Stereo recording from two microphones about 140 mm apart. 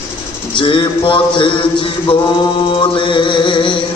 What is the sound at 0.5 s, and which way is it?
Music, 35° left (ahead or behind).